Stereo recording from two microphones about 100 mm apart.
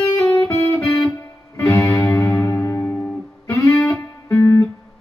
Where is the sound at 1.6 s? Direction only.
30° left (ahead or behind).